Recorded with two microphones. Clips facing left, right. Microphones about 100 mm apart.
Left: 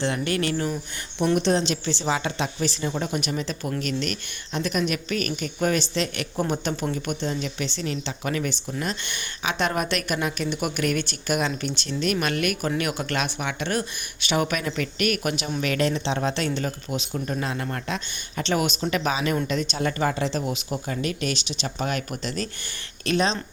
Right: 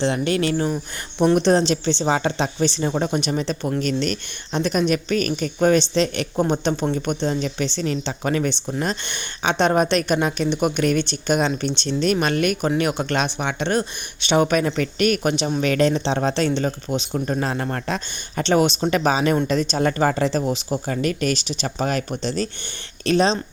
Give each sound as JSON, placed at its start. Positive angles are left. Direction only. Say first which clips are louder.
{"t": 0.0, "sound": "speech", "louder": "right 4 dB", "side_deg": -25}
{"t": 1.2, "sound": "speech", "louder": "right 5 dB", "side_deg": -40}
{"t": 7.3, "sound": "speech", "louder": "right 5 dB", "side_deg": -40}
{"t": 17.2, "sound": "speech", "louder": "right 5 dB", "side_deg": -40}
{"t": 20.9, "sound": "speech", "louder": "right 5 dB", "side_deg": -50}